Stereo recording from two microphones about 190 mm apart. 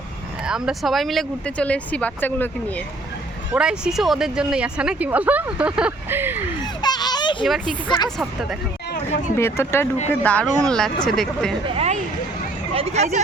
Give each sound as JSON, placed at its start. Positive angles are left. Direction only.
{"t": 0.4, "sound": "speech", "side_deg": -5}
{"t": 3.5, "sound": "speech", "side_deg": -5}
{"t": 6.8, "sound": "a sound", "side_deg": 20}
{"t": 7.9, "sound": "speech", "side_deg": 25}
{"t": 8.2, "sound": "speech", "side_deg": -5}
{"t": 9.3, "sound": "speech", "side_deg": 15}
{"t": 12.7, "sound": "speech", "side_deg": -35}